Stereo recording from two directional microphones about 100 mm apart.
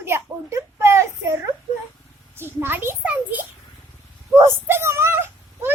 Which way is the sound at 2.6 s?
20° right (ahead or behind).